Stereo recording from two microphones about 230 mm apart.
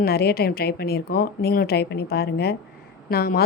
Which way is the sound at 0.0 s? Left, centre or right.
Left.